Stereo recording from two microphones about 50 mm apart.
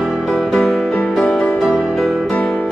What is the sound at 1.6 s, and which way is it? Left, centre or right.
Music, centre.